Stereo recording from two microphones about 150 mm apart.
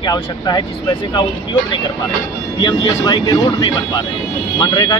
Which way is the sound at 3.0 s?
30° left (ahead or behind).